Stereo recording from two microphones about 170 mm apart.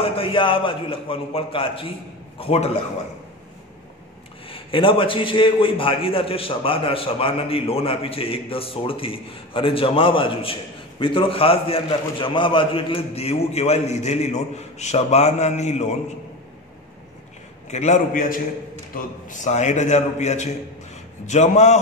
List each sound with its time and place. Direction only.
0.0 s a man's voice: 35° left (ahead or behind)
4.5 s a man's voice: 30° left (ahead or behind)
17.6 s a man's voice: 40° left (ahead or behind)